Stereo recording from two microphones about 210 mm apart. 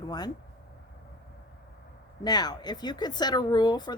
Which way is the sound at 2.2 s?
20° left (ahead or behind).